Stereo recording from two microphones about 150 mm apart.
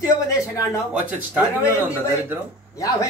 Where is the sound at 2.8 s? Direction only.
20° left (ahead or behind).